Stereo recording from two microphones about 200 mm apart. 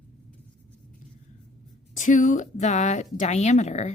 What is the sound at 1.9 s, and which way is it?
A woman's voice, 40° left (ahead or behind).